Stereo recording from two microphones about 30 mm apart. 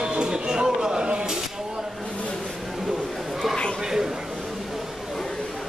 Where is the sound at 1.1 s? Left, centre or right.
Right.